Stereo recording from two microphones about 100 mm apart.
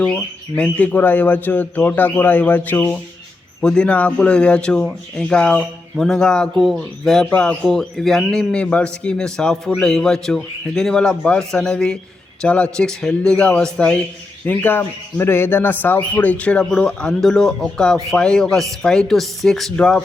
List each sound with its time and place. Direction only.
0.0 s speech: 10° left (ahead or behind)